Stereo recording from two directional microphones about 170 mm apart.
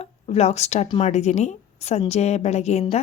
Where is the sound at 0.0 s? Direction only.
40° left (ahead or behind).